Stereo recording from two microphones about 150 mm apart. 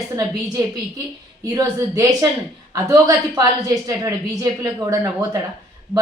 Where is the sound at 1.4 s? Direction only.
25° right (ahead or behind).